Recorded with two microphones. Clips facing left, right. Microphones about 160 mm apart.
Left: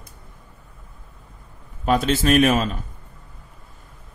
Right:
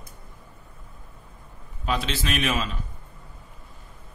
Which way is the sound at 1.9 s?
50° left (ahead or behind).